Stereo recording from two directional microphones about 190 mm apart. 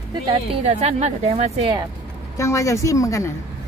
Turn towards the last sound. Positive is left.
turn(degrees=15)  # may be behind; listen again after turning